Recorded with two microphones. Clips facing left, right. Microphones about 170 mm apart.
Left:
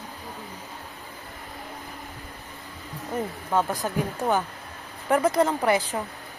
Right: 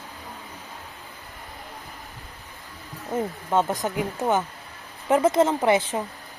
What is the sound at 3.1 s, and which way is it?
Speech, 25° right (ahead or behind).